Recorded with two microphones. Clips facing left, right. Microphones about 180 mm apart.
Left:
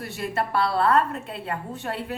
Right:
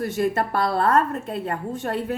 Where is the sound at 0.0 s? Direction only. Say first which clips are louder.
Right 6 dB; 45° right (ahead or behind).